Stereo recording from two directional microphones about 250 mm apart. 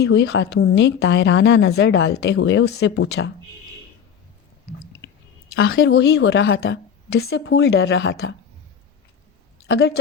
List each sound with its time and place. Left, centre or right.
0.0 s a woman's voice: left
5.5 s a woman's voice: left
9.6 s a woman's voice: left